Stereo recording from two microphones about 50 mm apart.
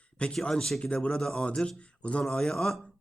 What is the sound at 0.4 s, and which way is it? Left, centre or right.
Speech, centre.